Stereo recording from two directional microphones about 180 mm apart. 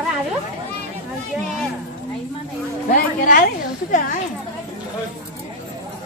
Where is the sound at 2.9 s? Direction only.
50° left (ahead or behind).